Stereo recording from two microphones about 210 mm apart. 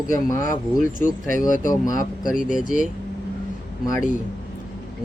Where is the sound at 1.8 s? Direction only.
15° left (ahead or behind).